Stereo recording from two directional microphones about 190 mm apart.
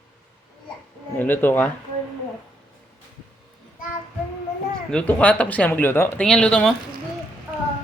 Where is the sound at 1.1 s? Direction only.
10° left (ahead or behind).